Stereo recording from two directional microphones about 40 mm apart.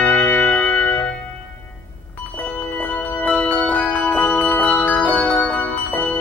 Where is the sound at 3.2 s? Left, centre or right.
Left.